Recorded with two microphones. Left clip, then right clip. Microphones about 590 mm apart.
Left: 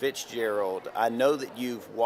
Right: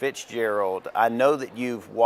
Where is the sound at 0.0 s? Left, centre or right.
Right.